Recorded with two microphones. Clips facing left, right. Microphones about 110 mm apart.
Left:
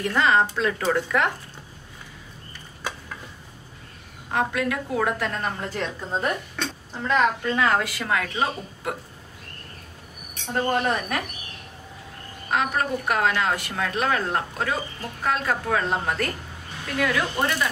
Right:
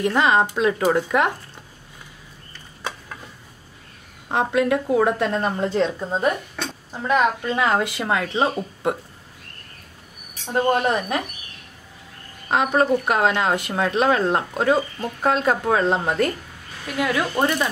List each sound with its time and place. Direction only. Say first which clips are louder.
0.0 s a woman's voice: right 2 dB; 20° right (ahead or behind)
4.3 s a woman's voice: right 5 dB; 25° right (ahead or behind)
10.5 s a woman's voice: right 4 dB; 20° right (ahead or behind)
12.4 s a woman's voice: right 6 dB; 25° right (ahead or behind)